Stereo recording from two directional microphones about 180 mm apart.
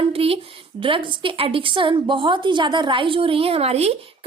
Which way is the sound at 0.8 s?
30° right (ahead or behind).